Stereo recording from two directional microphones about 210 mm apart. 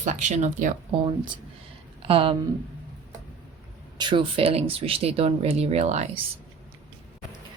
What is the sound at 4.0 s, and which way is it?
Speech, 25° right (ahead or behind).